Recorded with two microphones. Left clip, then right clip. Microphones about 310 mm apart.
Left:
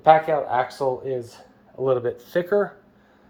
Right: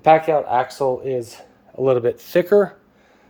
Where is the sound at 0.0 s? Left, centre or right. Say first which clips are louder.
Right 2 dB; right.